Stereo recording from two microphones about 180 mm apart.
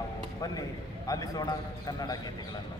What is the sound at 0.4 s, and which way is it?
A man's voice, 20° left (ahead or behind).